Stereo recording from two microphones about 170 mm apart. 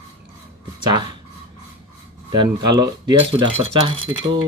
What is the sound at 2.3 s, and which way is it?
Speech, 25° right (ahead or behind).